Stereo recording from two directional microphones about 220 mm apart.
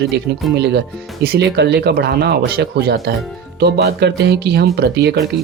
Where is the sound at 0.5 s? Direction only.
50° right (ahead or behind).